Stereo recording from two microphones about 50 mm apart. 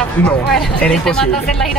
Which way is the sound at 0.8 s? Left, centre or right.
Centre.